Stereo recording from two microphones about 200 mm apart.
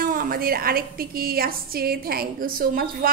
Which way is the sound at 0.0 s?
45° right (ahead or behind).